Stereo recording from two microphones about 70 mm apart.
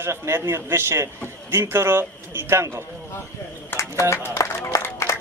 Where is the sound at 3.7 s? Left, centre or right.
Left.